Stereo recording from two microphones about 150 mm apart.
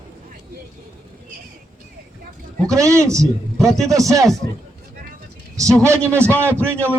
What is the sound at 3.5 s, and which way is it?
Speech, centre (ahead or behind).